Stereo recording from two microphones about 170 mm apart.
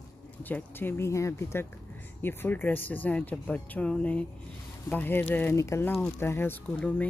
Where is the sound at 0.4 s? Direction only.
10° left (ahead or behind).